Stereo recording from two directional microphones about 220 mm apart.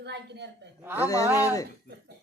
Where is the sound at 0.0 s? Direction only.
50° right (ahead or behind).